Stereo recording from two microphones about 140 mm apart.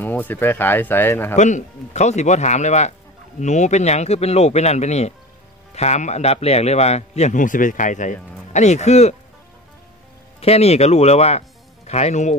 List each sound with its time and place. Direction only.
0.0 s speech: 15° left (ahead or behind)
1.3 s a man's voice: 60° left (ahead or behind)
10.4 s a man's voice: 50° left (ahead or behind)